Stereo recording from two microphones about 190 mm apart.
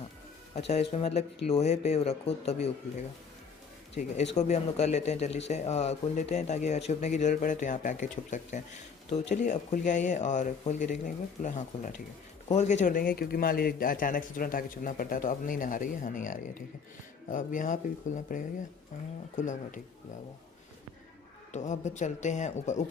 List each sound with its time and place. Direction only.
0.7 s speech: 35° left (ahead or behind)
4.4 s speech: 35° left (ahead or behind)
21.5 s speech: 40° left (ahead or behind)